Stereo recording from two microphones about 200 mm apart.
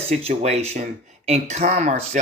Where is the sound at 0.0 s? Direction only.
30° right (ahead or behind).